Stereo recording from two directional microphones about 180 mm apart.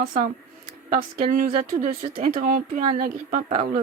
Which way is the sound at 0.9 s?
50° right (ahead or behind).